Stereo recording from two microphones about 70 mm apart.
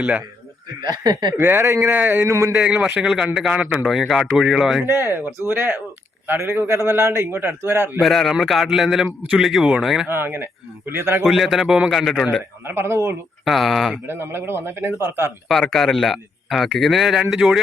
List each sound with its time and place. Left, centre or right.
0.0 s a man's voice: centre
0.8 s speech: right
1.4 s a man's voice: right
2.2 s a man's voice: right
2.6 s a man's voice: centre
4.9 s a man's voice: right
8.0 s a man's voice: centre
10.1 s a man's voice: right
11.3 s a man's voice: centre
12.6 s a man's voice: right
13.4 s a man's voice: centre
14.1 s a man's voice: right
15.7 s a man's voice: centre